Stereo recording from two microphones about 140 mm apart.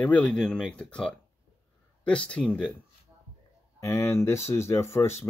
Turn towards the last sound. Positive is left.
turn(degrees=20)  # may be behind; listen again after turning